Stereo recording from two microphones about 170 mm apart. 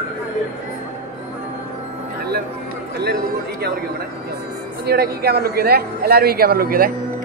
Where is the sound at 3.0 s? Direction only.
70° right (ahead or behind).